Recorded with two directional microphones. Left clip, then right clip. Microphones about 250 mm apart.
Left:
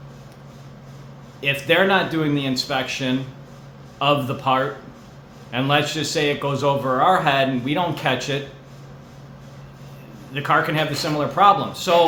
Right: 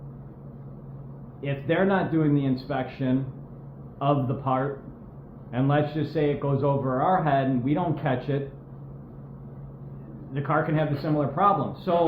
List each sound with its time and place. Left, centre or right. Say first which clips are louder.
1.4 s a man's voice: left 8 dB; centre
10.3 s a man's voice: left 6 dB; centre